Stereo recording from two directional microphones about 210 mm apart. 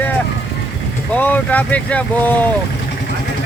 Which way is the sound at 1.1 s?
5° left (ahead or behind).